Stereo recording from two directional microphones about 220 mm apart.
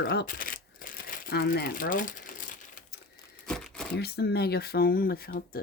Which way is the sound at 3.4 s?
5° left (ahead or behind).